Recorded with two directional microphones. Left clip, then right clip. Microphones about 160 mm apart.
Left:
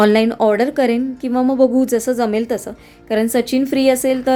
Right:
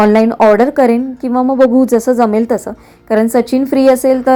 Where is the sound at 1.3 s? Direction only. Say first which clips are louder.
Right 4 dB; 25° left (ahead or behind).